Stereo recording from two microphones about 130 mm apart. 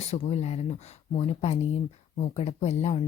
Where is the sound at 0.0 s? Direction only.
55° left (ahead or behind).